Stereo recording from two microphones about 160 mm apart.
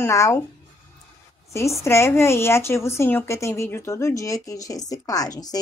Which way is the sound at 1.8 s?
15° left (ahead or behind).